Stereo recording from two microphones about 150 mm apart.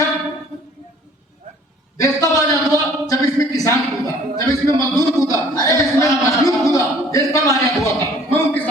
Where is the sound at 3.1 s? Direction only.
25° left (ahead or behind).